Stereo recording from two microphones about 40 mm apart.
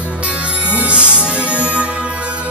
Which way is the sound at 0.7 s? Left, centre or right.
Right.